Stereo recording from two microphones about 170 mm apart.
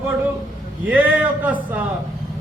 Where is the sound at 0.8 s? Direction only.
10° right (ahead or behind).